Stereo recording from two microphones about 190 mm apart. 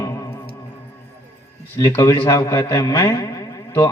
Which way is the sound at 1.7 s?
15° left (ahead or behind).